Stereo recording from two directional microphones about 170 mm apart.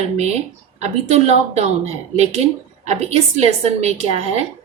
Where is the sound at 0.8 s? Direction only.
40° right (ahead or behind).